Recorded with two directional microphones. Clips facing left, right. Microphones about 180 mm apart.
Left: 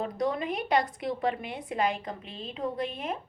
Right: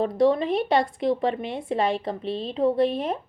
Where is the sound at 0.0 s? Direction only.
30° right (ahead or behind).